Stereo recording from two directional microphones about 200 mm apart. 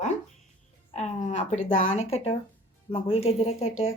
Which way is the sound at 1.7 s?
90° left.